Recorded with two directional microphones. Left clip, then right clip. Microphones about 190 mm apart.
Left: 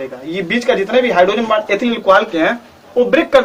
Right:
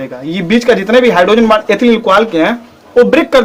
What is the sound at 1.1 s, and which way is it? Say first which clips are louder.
Speech: right 4 dB; 55° right (ahead or behind).